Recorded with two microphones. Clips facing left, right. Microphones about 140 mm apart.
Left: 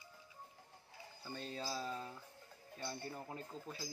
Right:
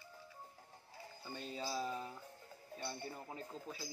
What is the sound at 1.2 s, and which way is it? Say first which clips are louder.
Speech: even; 5° right (ahead or behind).